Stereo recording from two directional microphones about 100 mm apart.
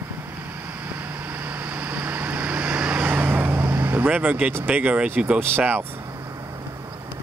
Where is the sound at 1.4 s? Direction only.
15° right (ahead or behind).